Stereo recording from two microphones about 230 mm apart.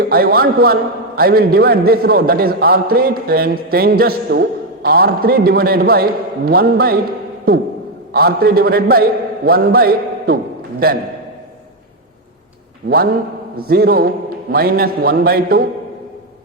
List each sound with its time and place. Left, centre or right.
0.0 s a man's voice: right
8.1 s a man's voice: right
13.6 s a man's voice: right